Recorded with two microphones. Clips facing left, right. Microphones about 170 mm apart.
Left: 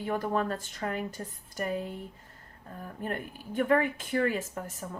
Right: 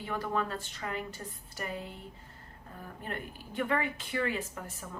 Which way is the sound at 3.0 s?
45° left (ahead or behind).